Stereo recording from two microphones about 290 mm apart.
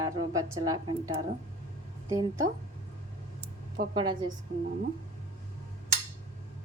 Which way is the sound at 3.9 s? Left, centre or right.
Centre.